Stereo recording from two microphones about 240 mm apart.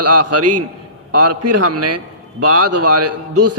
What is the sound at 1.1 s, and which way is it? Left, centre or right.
A man's voice, right.